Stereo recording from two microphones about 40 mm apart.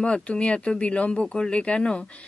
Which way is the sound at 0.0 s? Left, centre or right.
Left.